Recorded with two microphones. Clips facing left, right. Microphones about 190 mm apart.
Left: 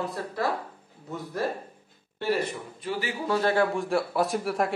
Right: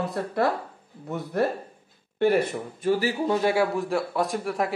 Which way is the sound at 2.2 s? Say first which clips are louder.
Right 6 dB; 50° right (ahead or behind).